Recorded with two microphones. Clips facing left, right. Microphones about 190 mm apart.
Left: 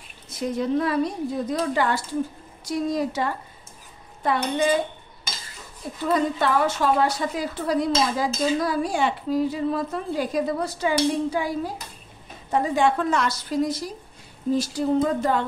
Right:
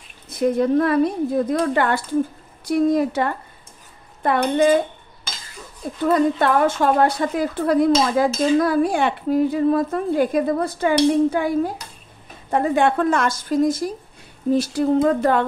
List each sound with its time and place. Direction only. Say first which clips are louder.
0.3 s a woman's voice: right 6 dB; 55° right (ahead or behind)
6.0 s a woman's voice: right 5 dB; 55° right (ahead or behind)
14.5 s a woman's voice: right 4 dB; 60° right (ahead or behind)